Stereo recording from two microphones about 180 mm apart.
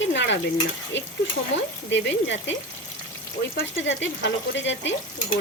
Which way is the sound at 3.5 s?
90° left.